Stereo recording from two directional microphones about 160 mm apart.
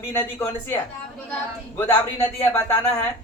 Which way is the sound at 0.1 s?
15° left (ahead or behind).